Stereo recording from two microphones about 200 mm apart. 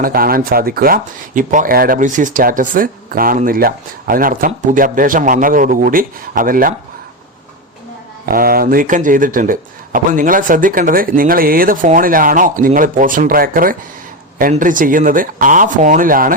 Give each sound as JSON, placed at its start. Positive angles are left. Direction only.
{"t": 0.0, "sound": "speech", "side_deg": -50}
{"t": 8.3, "sound": "speech", "side_deg": -45}